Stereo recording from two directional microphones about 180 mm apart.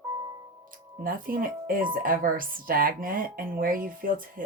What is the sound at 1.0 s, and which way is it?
Speech, 50° right (ahead or behind).